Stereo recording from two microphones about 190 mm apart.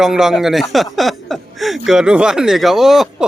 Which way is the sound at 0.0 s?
5° right (ahead or behind).